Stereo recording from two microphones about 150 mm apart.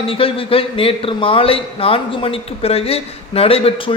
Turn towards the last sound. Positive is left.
turn(degrees=40)  # may be behind; listen again after turning